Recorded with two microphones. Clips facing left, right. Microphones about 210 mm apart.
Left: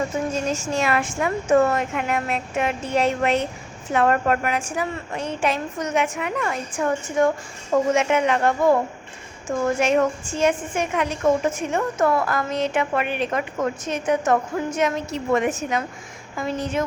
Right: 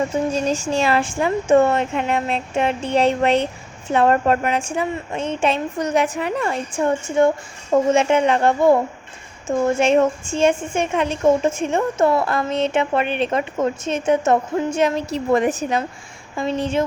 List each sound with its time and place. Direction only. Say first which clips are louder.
0.3 s speech: right 4 dB; 35° right (ahead or behind)